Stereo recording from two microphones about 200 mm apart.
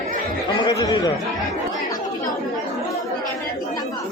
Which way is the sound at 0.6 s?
20° left (ahead or behind).